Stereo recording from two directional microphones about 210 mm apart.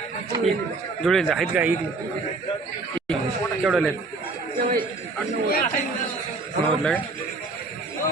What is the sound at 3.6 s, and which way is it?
Speech, centre (ahead or behind).